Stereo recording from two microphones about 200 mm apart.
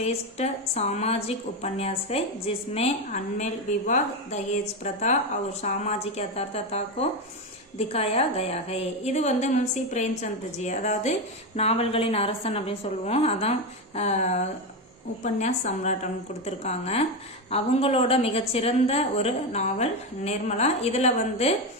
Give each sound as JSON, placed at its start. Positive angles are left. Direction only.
{"t": 0.0, "sound": "a woman's voice", "side_deg": 30}